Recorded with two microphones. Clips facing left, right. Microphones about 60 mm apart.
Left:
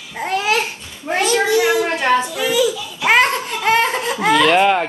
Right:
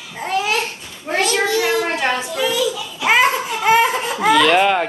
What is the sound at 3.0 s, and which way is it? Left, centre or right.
Laughter, centre.